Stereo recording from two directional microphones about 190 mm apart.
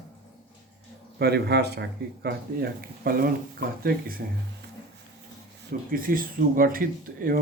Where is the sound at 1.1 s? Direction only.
60° right (ahead or behind).